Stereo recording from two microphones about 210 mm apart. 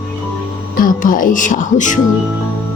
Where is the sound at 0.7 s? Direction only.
40° left (ahead or behind).